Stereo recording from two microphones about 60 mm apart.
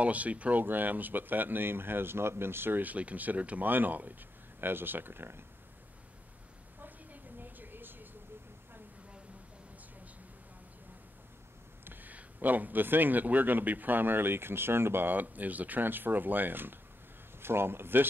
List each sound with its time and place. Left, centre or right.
0.0 s speech: right
6.8 s a sound: right
11.8 s speech: right